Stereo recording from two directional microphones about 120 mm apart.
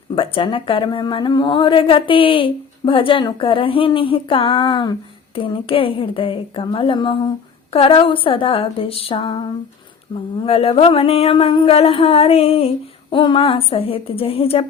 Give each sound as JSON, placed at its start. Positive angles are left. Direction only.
{"t": 0.2, "sound": "a woman's voice", "side_deg": 45}
{"t": 10.4, "sound": "a woman's voice", "side_deg": 55}